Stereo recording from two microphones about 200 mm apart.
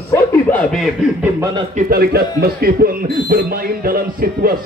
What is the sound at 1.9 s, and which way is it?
Speech, 50° right (ahead or behind).